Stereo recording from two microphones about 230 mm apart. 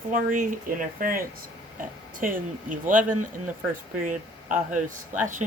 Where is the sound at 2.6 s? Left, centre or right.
Right.